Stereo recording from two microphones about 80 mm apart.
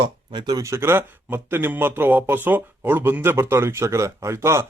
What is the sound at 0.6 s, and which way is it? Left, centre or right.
Speech, right.